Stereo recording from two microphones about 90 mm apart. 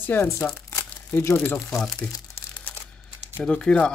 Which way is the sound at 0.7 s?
30° left (ahead or behind).